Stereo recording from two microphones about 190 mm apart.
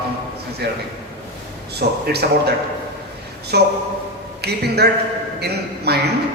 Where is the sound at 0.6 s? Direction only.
60° right (ahead or behind).